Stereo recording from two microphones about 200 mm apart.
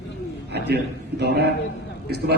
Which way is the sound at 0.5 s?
55° right (ahead or behind).